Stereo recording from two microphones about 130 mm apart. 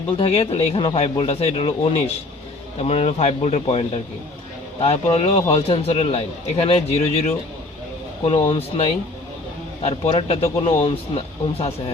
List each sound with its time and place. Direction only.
0.2 s a man's voice: 50° left (ahead or behind)
8.4 s a man's voice: 45° left (ahead or behind)